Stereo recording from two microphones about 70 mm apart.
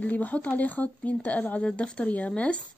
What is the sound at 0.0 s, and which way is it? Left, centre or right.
A woman's voice, left.